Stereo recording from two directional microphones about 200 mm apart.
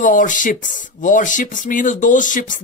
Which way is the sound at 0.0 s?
40° left (ahead or behind).